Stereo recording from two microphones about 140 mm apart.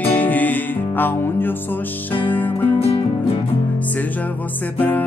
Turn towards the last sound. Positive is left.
turn(degrees=10)  # may be behind; listen again after turning